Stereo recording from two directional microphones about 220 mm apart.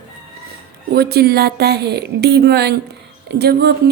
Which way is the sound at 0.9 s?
45° right (ahead or behind).